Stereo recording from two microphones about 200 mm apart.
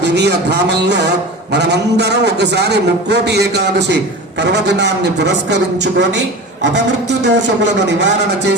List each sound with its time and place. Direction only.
0.0 s a man's voice: 60° right (ahead or behind)